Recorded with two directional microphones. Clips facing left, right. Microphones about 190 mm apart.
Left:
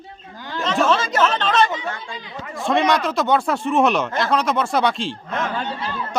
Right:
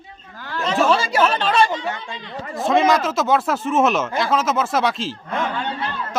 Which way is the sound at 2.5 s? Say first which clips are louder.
Right 2 dB; centre (ahead or behind).